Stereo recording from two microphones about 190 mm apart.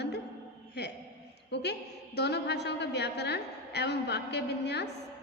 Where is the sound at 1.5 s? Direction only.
60° left (ahead or behind).